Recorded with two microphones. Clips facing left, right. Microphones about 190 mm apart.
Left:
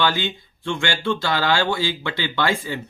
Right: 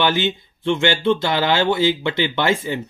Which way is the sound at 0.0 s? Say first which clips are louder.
Right 3 dB; 20° right (ahead or behind).